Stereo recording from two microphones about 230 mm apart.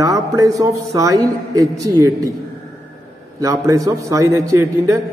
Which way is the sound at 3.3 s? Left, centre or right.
Centre.